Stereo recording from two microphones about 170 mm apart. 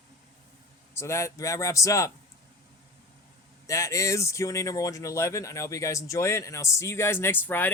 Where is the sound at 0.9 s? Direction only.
15° left (ahead or behind).